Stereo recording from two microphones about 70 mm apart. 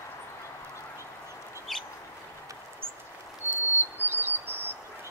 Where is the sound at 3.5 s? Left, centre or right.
Right.